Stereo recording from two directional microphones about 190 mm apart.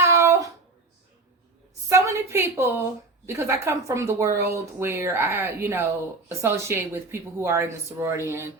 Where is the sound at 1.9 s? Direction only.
15° right (ahead or behind).